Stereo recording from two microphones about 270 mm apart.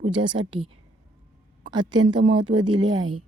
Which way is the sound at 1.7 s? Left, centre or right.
Centre.